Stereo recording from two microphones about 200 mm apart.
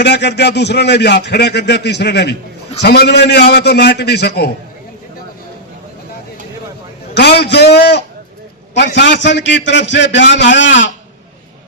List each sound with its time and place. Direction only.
0.0 s a man's voice: 55° left (ahead or behind)
7.1 s a man's voice: 55° left (ahead or behind)